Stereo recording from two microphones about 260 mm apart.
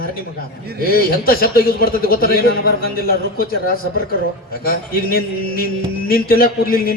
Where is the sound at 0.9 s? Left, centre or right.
Left.